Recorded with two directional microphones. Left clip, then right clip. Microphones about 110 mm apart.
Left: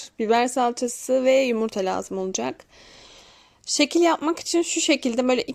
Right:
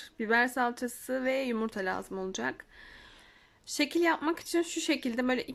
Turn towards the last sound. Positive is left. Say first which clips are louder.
# left 9 dB
turn(degrees=20)  # may be behind; listen again after turning